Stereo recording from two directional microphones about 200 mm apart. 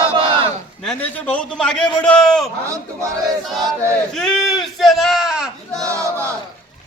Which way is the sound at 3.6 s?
15° right (ahead or behind).